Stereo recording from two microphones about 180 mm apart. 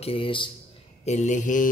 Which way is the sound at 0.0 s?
30° left (ahead or behind).